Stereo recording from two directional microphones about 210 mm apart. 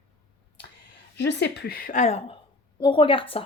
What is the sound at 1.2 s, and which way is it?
A woman's voice, 55° left (ahead or behind).